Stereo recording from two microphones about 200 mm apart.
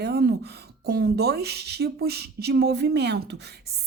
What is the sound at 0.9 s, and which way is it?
Speech, 50° right (ahead or behind).